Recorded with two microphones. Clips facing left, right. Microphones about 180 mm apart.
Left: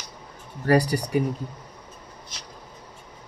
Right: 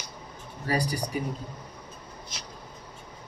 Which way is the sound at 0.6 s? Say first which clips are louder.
Left 8 dB; 75° left (ahead or behind).